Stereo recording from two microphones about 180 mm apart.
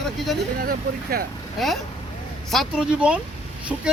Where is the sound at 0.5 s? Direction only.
55° right (ahead or behind).